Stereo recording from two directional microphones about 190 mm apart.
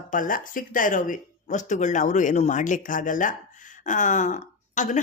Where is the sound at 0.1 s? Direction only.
45° left (ahead or behind).